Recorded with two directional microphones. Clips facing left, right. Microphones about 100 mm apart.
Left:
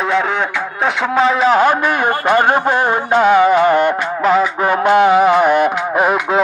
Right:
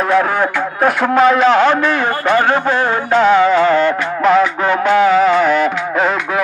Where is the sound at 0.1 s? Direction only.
5° right (ahead or behind); by 3.9 s 15° left (ahead or behind).